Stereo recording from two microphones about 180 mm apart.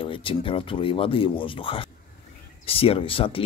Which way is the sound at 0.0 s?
30° left (ahead or behind).